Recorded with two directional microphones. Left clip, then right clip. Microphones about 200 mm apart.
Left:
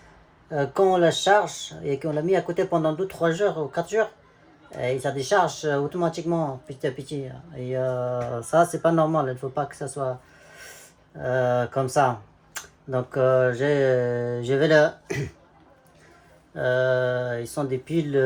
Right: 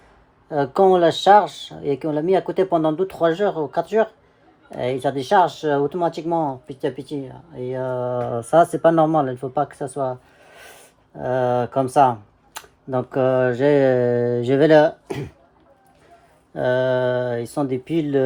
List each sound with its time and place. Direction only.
0.5 s speech: 30° right (ahead or behind)
11.2 s speech: 30° right (ahead or behind)
16.6 s speech: 30° right (ahead or behind)